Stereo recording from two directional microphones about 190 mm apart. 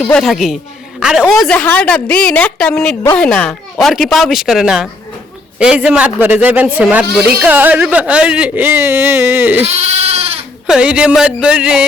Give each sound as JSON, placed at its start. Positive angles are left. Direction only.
{"t": 0.0, "sound": "a woman's voice", "side_deg": 0}
{"t": 9.6, "sound": "sheep", "side_deg": -35}
{"t": 10.7, "sound": "a woman's voice", "side_deg": -5}